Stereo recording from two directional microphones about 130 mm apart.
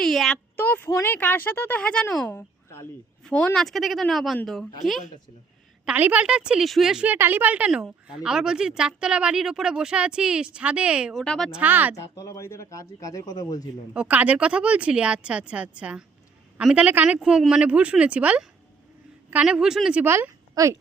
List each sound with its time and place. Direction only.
0.0 s a sound: 5° left (ahead or behind)
0.5 s a woman's voice: 15° left (ahead or behind)
5.8 s a woman's voice: 10° right (ahead or behind)
11.2 s a woman's voice: 5° left (ahead or behind)
11.6 s a woman's voice: 15° right (ahead or behind)
11.9 s a man's voice: 25° left (ahead or behind)
13.9 s a woman's voice: 10° right (ahead or behind)
20.1 s a woman's voice: 20° right (ahead or behind)